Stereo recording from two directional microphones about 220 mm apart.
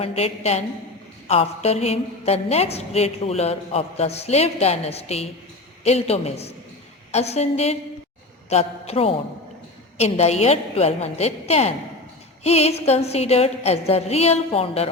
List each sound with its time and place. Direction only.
0.0 s a woman's voice: 30° left (ahead or behind)